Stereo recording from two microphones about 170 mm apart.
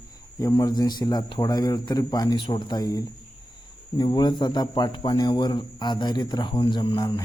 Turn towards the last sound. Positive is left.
turn(degrees=25)  # may be behind; listen again after turning